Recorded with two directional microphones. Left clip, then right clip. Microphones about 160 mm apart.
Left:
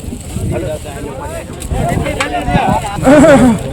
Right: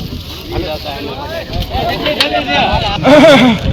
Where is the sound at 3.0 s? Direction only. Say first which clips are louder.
Right 1 dB; 35° left (ahead or behind).